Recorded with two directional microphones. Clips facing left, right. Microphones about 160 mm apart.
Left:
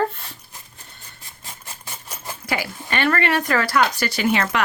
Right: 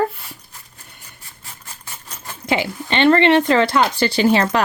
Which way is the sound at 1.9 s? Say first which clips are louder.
Left 2 dB; 10° left (ahead or behind).